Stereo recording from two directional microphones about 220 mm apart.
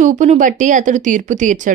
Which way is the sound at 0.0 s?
35° right (ahead or behind).